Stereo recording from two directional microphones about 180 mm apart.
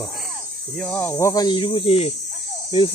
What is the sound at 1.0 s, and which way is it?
Speech, 15° left (ahead or behind).